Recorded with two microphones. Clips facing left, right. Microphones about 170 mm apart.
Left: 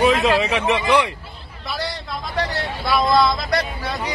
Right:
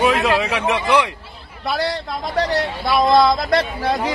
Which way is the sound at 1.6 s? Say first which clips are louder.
Right 6 dB; 70° right (ahead or behind).